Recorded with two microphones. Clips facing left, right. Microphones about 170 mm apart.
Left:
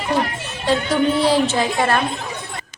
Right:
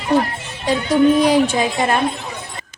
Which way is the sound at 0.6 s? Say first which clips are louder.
Right 4 dB; 15° right (ahead or behind).